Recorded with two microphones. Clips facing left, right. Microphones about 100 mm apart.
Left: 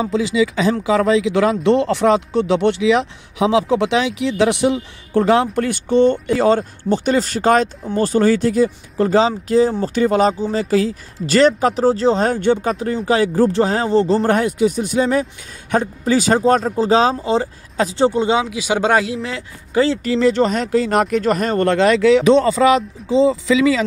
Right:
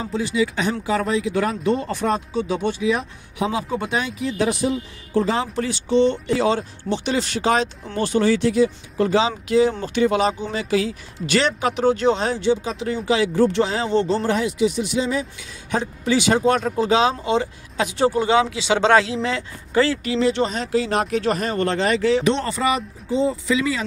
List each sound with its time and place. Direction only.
0.0 s speech: 90° left; by 14.2 s 35° left (ahead or behind)
14.2 s speech: 50° left (ahead or behind); by 20.0 s 20° left (ahead or behind)
20.0 s speech: 45° left (ahead or behind)
21.7 s speech: 90° left